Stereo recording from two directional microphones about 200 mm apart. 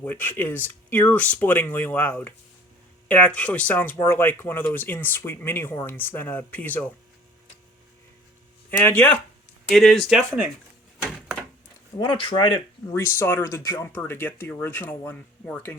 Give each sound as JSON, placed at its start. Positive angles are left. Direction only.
{"t": 0.0, "sound": "speech", "side_deg": 10}
{"t": 8.8, "sound": "speech", "side_deg": 10}
{"t": 11.9, "sound": "speech", "side_deg": 25}